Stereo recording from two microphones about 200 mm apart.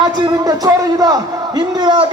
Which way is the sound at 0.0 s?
20° right (ahead or behind).